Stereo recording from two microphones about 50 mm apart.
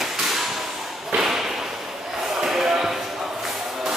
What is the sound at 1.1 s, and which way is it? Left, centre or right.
Thump, centre.